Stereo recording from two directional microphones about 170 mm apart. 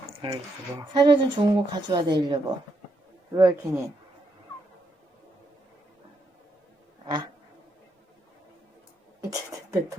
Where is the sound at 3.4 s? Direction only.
20° right (ahead or behind).